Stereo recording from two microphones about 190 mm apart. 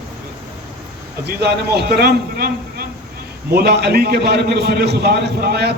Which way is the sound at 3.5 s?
55° right (ahead or behind).